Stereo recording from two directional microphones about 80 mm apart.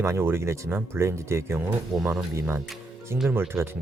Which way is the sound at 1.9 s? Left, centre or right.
Centre.